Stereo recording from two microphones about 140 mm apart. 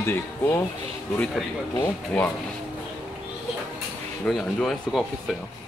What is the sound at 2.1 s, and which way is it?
Speech, 10° left (ahead or behind).